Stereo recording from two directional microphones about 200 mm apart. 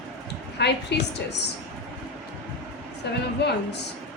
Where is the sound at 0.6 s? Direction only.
60° left (ahead or behind).